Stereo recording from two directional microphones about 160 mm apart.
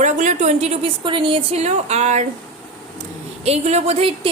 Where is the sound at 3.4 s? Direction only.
40° right (ahead or behind).